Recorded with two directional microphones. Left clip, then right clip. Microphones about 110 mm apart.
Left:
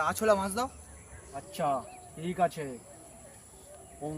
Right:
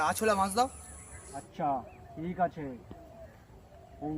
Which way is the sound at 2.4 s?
55° left (ahead or behind).